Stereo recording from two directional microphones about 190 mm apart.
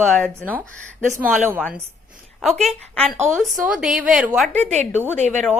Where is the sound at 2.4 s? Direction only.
Centre (ahead or behind).